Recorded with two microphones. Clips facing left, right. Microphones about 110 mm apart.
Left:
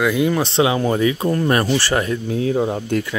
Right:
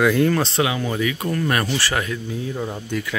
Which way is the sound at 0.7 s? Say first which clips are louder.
Left 6 dB; 35° left (ahead or behind).